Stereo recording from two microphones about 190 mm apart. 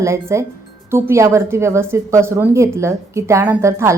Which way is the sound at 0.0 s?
15° right (ahead or behind).